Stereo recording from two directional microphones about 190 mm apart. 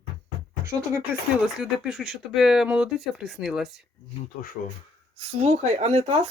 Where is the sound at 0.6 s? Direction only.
15° right (ahead or behind).